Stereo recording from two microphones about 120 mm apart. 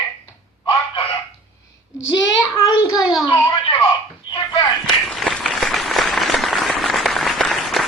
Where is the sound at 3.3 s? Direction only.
35° left (ahead or behind).